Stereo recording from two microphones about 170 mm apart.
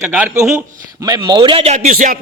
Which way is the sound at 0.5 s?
20° right (ahead or behind).